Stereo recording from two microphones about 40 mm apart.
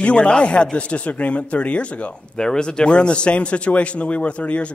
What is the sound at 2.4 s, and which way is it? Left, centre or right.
A man's voice, centre.